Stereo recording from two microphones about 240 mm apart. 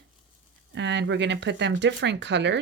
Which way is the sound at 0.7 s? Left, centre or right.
Right.